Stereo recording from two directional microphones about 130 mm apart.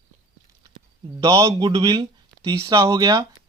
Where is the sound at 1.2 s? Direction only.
25° right (ahead or behind).